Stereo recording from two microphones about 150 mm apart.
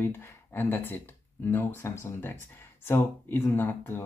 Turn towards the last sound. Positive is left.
turn(degrees=15)  # may be behind; listen again after turning